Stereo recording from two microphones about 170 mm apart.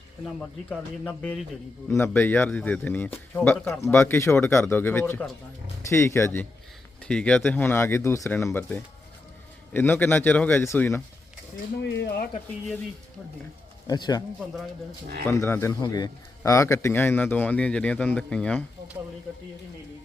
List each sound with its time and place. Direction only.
0.3 s speech: 5° left (ahead or behind)
11.8 s speech: 90° left
13.8 s speech: 25° left (ahead or behind)
15.2 s speech: 15° left (ahead or behind)